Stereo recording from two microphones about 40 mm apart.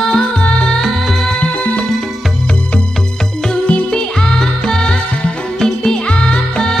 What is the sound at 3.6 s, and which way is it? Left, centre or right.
Music, left.